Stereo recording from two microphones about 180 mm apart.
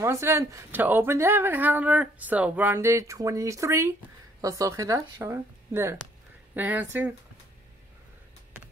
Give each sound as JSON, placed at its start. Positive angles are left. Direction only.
{"t": 0.0, "sound": "a woman's voice", "side_deg": -15}